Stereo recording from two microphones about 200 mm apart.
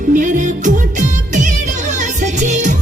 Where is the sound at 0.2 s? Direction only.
40° right (ahead or behind).